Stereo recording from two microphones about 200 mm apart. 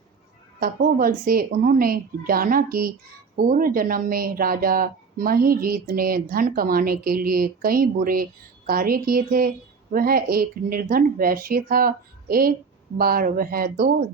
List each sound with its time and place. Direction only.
0.6 s speech: 50° right (ahead or behind)